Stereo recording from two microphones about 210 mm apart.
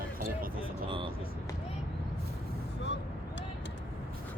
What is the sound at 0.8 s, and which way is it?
Vehicle, 25° right (ahead or behind).